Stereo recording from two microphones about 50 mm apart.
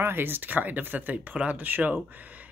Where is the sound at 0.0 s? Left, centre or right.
Right.